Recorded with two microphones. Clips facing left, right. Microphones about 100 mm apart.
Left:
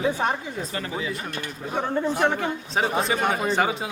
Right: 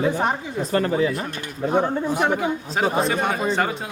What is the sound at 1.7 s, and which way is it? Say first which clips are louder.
A man's voice: right 2 dB; 15° right (ahead or behind).